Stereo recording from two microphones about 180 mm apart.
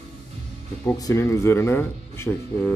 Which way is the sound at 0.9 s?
15° left (ahead or behind).